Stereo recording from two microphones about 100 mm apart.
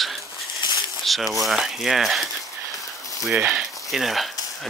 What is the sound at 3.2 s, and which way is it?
Speech, 10° right (ahead or behind).